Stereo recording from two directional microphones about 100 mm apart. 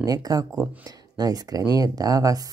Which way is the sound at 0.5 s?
15° right (ahead or behind).